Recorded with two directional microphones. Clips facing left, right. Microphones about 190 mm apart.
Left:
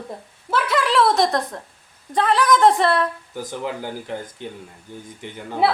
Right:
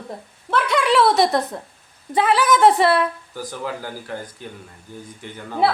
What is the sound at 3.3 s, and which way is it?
A man's voice, 20° left (ahead or behind).